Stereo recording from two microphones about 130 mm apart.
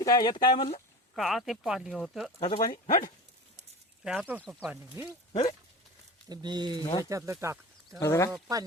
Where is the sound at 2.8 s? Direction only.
90° left.